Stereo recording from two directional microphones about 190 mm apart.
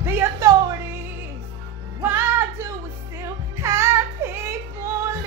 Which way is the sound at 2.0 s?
15° right (ahead or behind).